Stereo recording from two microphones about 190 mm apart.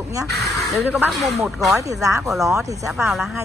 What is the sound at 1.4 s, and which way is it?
Speech, 15° right (ahead or behind).